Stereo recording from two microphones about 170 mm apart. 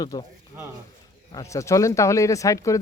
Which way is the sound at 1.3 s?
20° left (ahead or behind).